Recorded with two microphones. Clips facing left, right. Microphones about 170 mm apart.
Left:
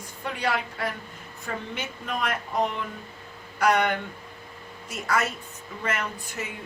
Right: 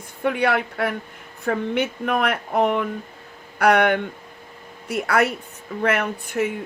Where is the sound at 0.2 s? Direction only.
60° right (ahead or behind).